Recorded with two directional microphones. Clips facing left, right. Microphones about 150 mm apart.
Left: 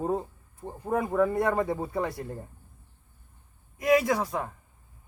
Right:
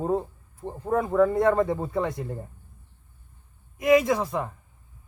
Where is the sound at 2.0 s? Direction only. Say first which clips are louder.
Right 4 dB; 20° right (ahead or behind).